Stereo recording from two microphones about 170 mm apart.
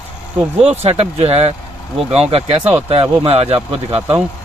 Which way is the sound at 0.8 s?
35° right (ahead or behind).